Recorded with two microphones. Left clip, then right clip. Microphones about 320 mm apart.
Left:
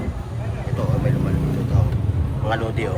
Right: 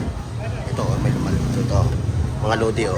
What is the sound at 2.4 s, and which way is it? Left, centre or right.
Speech, centre.